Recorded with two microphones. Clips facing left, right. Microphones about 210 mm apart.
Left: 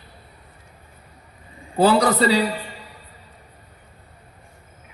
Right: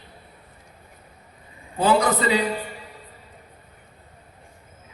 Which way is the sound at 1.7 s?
35° left (ahead or behind).